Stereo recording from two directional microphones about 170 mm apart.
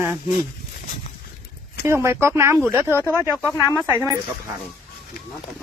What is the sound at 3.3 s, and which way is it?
Speech, 5° left (ahead or behind).